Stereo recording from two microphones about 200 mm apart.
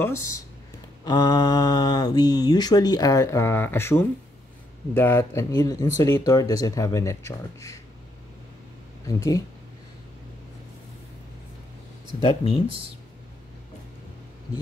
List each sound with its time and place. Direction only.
0.0 s speech: 15° left (ahead or behind)
9.0 s speech: 15° left (ahead or behind)
12.2 s speech: 30° left (ahead or behind)